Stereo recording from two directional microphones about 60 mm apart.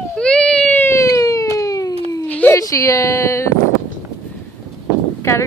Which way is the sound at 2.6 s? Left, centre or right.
Left.